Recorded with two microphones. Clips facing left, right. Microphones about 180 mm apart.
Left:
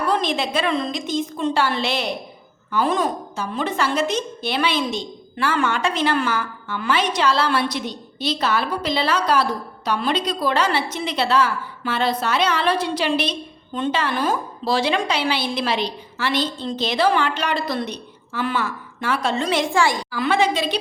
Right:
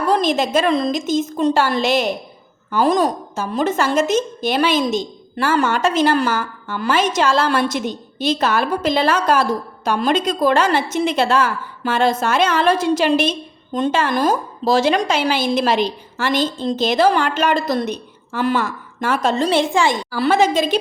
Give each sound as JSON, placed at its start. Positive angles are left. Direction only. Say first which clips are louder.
{"t": 0.1, "sound": "a woman's voice", "louder": "right 7 dB", "side_deg": -45}
{"t": 19.7, "sound": "a woman's voice", "louder": "right 2 dB", "side_deg": -20}
{"t": 20.1, "sound": "a woman's voice", "louder": "right 4 dB", "side_deg": -40}